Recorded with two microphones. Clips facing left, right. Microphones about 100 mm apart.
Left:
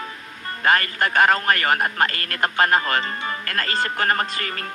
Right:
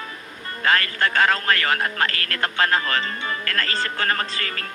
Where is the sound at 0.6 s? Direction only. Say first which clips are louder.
Left 1 dB; 15° left (ahead or behind).